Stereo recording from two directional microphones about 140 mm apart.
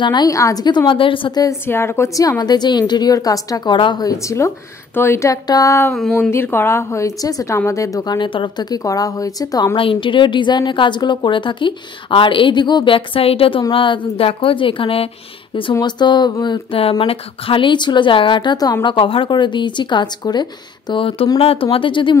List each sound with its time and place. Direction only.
0.0 s a woman's voice: 30° left (ahead or behind)
1.4 s a woman's voice: 20° left (ahead or behind)
9.8 s a woman's voice: 40° left (ahead or behind)